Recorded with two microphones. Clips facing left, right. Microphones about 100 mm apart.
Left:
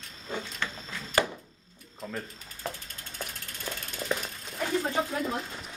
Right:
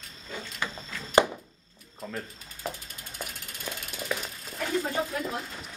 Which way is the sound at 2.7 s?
10° right (ahead or behind).